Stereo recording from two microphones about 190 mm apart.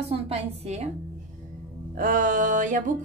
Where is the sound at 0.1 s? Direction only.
35° right (ahead or behind).